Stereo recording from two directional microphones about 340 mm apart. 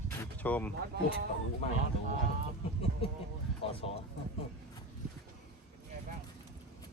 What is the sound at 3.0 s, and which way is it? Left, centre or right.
Speech, centre.